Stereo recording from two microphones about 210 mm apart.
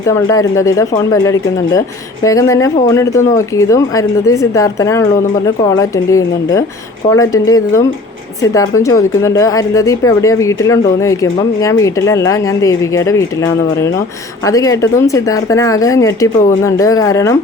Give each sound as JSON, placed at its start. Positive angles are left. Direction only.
{"t": 0.0, "sound": "speech", "side_deg": 15}